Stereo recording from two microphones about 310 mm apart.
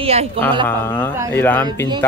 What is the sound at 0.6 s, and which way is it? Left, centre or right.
Speech, centre.